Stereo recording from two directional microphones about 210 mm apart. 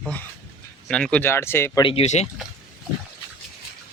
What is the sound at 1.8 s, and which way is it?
Speech, 25° left (ahead or behind).